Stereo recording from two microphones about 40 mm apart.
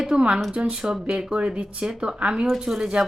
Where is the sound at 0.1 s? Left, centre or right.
Right.